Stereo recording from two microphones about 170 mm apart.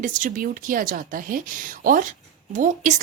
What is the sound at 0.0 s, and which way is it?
Speech, 50° right (ahead or behind).